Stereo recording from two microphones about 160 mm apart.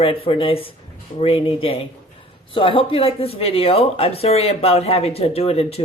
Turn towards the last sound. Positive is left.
turn(degrees=40)  # may be behind; listen again after turning